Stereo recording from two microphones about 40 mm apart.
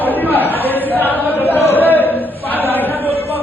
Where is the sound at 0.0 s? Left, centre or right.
Left.